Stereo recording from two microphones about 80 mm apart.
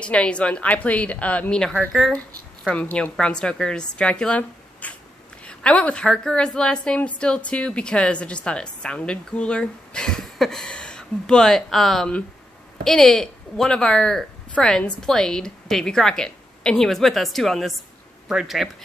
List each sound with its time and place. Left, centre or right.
0.0 s a woman's voice: centre
1.9 s a woman's voice: centre
2.7 s a woman's voice: centre